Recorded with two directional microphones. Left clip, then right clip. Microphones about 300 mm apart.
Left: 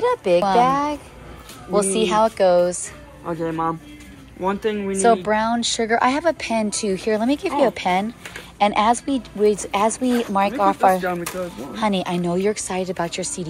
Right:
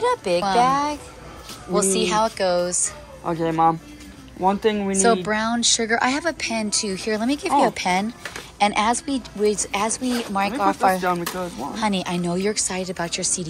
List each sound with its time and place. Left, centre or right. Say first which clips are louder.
0.0 s speech: left 3 dB; centre
3.3 s speech: right 4 dB; right
5.0 s speech: left 3 dB; centre